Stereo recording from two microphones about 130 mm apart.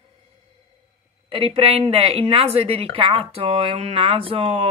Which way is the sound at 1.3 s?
45° right (ahead or behind).